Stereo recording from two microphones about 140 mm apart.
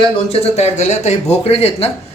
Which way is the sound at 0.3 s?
45° left (ahead or behind).